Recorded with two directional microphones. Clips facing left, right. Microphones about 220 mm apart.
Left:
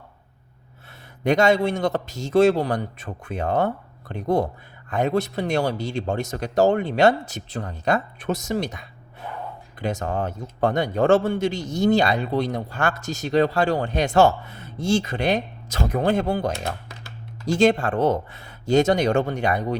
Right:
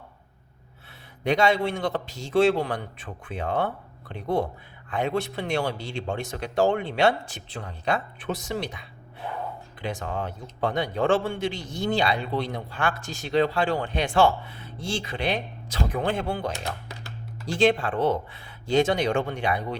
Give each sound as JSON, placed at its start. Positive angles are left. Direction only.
{"t": 1.2, "sound": "a man's voice", "side_deg": 45}